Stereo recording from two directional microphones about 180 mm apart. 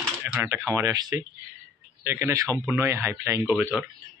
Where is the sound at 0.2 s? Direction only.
15° right (ahead or behind).